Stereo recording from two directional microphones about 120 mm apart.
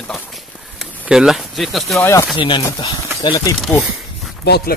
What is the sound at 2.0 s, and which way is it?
Speech, 20° left (ahead or behind).